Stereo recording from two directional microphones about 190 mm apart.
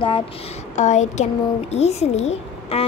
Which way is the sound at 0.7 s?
40° left (ahead or behind).